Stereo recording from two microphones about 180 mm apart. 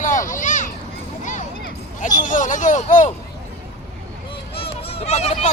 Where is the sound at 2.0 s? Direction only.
45° left (ahead or behind).